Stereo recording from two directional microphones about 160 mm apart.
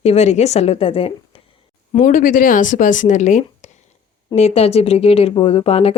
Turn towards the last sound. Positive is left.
turn(degrees=40)  # may be behind; listen again after turning